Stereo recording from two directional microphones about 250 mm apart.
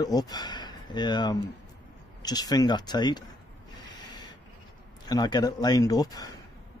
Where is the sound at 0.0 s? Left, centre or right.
Centre.